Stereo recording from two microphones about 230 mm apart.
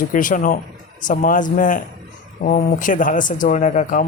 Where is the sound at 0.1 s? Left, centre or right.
Left.